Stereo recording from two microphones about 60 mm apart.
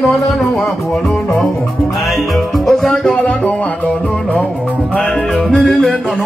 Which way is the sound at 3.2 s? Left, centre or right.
Centre.